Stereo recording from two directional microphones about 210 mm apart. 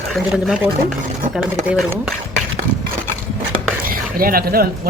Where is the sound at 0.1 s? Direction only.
Centre (ahead or behind).